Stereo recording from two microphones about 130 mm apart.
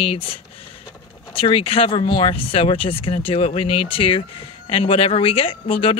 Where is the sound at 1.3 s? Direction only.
45° left (ahead or behind).